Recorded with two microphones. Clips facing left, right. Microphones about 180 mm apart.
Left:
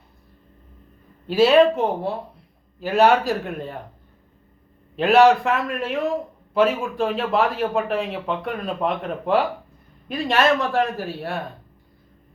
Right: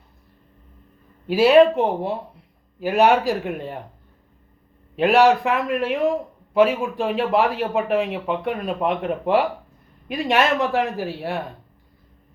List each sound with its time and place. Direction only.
1.3 s a man's voice: 15° right (ahead or behind)
5.0 s a man's voice: 10° right (ahead or behind)